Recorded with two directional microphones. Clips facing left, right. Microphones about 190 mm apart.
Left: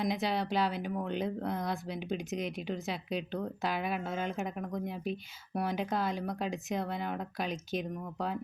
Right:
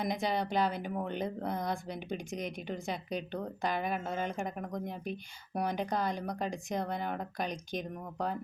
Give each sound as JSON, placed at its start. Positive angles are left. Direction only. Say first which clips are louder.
{"t": 0.0, "sound": "speech", "louder": "left 1 dB", "side_deg": 0}